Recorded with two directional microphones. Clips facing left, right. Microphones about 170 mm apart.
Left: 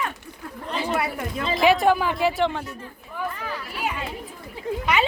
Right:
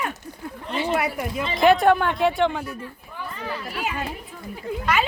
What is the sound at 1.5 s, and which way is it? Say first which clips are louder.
Speech: right 2 dB; centre (ahead or behind).